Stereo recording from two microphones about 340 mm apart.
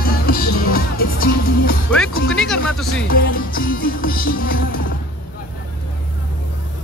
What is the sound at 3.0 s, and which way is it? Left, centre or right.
Music, left.